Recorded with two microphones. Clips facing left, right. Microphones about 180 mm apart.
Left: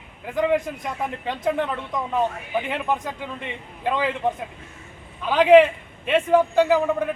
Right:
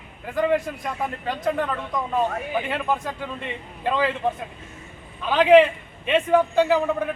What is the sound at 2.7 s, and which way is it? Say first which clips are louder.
Speech: even; 15° left (ahead or behind).